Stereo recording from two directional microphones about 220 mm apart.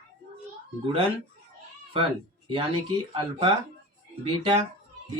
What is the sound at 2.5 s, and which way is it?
Speech, 20° right (ahead or behind).